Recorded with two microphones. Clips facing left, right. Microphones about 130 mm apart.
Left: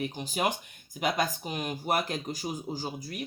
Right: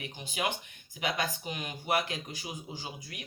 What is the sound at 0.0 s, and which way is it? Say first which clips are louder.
Speech: left 5 dB; 35° left (ahead or behind).